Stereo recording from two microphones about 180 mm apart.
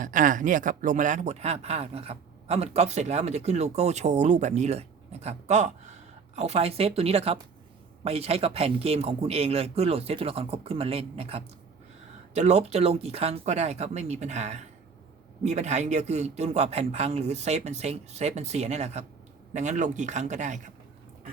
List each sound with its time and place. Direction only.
0.0 s speech: 45° right (ahead or behind)